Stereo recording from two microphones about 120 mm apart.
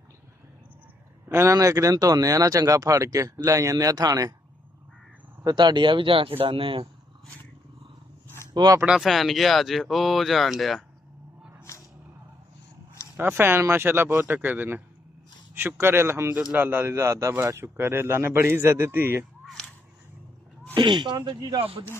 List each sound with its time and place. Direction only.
1.3 s speech: 20° right (ahead or behind)
5.4 s speech: 35° right (ahead or behind)
8.5 s speech: 30° right (ahead or behind)
8.8 s speech: 5° right (ahead or behind)
11.7 s music: 25° left (ahead or behind)
13.1 s speech: 15° right (ahead or behind)
20.7 s speech: 40° right (ahead or behind)